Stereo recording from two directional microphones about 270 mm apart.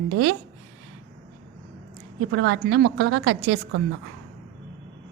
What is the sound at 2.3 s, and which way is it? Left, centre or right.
A woman's voice, right.